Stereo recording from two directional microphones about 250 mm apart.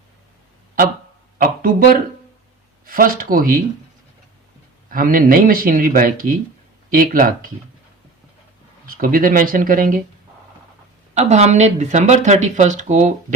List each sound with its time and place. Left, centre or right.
1.4 s a sound: right
2.8 s speech: right
4.9 s speech: right
8.9 s speech: right
11.1 s speech: right